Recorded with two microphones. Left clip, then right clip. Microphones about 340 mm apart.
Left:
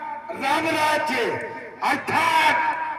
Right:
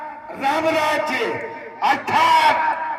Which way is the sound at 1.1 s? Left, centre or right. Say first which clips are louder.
Right 1 dB; centre.